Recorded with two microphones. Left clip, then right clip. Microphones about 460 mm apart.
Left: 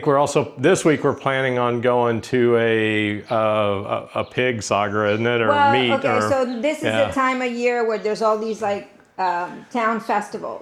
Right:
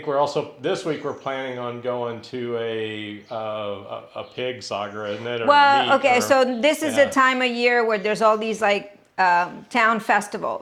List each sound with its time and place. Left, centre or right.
0.0 s speech: left
5.5 s a woman's voice: centre
8.4 s a woman's voice: centre